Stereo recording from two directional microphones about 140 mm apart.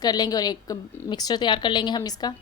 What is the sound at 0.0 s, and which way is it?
A woman's voice, 30° left (ahead or behind).